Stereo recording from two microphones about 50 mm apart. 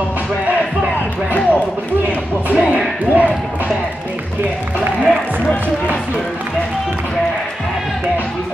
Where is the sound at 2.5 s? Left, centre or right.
Right.